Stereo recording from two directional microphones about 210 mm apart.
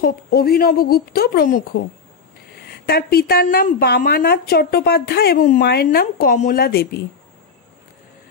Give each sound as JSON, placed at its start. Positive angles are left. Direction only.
{"t": 0.0, "sound": "a woman's voice", "side_deg": 45}
{"t": 2.7, "sound": "a woman's voice", "side_deg": 45}